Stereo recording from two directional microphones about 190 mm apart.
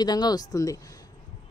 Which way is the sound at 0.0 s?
20° left (ahead or behind).